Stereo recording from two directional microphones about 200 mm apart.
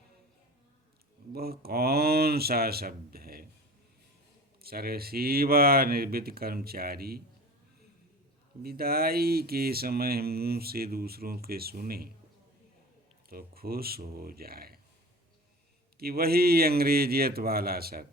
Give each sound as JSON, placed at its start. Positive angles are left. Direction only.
{"t": 1.3, "sound": "speech", "side_deg": -50}
{"t": 4.6, "sound": "speech", "side_deg": -50}
{"t": 8.6, "sound": "speech", "side_deg": -50}
{"t": 13.3, "sound": "speech", "side_deg": -50}
{"t": 16.0, "sound": "speech", "side_deg": -50}